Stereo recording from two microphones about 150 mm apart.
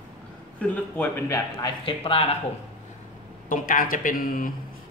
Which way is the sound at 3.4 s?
60° left (ahead or behind).